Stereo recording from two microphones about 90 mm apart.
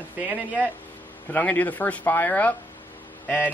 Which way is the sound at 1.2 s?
20° left (ahead or behind).